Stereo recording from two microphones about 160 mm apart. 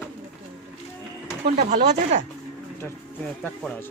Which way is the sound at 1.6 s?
45° right (ahead or behind).